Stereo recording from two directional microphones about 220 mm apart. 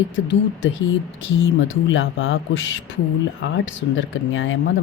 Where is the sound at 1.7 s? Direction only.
60° left (ahead or behind).